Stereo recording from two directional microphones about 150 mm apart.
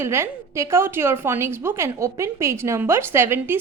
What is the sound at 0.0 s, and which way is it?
A woman's voice, 15° right (ahead or behind).